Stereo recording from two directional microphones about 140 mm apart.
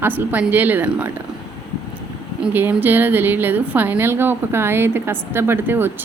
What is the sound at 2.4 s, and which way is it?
A woman's voice, 15° right (ahead or behind).